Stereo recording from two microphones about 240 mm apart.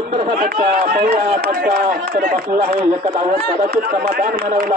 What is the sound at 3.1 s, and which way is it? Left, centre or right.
A man's voice, right.